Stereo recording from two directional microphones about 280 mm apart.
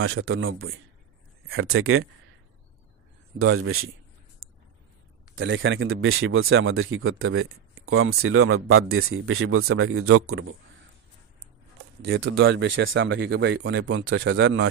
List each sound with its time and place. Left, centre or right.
0.0 s speech: right
3.3 s speech: right
5.3 s speech: right
12.3 s speech: right